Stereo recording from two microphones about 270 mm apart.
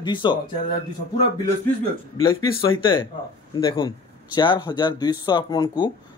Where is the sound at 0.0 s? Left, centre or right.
Centre.